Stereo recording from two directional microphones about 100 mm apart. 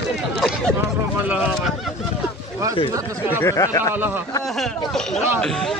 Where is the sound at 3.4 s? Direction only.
30° left (ahead or behind).